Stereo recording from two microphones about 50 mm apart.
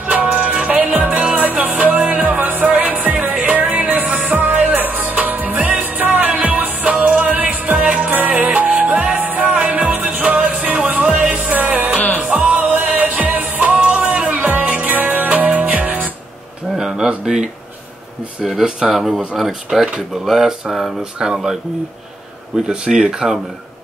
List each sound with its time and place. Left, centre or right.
0.0 s music: right
0.3 s music: centre
0.6 s music: right
11.2 s music: centre
11.5 s music: right
14.3 s music: right
16.7 s a sound: centre
18.4 s speech: centre
22.7 s speech: centre